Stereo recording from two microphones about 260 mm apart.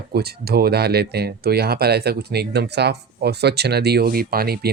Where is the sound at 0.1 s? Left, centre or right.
Right.